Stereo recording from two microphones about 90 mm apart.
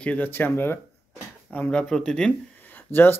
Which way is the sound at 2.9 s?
25° left (ahead or behind).